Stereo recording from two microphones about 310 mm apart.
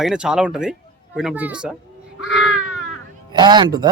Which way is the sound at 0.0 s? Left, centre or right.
Centre.